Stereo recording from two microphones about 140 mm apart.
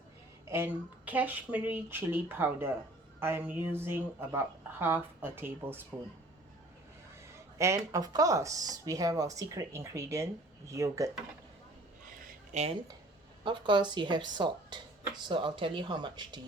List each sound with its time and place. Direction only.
0.4 s a woman's voice: 15° right (ahead or behind)
7.6 s speech: 20° right (ahead or behind)
12.5 s speech: 55° right (ahead or behind)
13.4 s speech: 35° right (ahead or behind)